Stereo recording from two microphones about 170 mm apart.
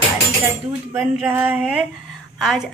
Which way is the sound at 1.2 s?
10° right (ahead or behind).